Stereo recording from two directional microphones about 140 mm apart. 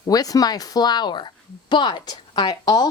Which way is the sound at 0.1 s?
25° left (ahead or behind).